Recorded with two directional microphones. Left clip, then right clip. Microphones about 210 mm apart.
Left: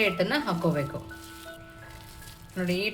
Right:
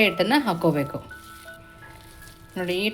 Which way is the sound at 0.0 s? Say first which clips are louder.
Right 5 dB; 40° right (ahead or behind).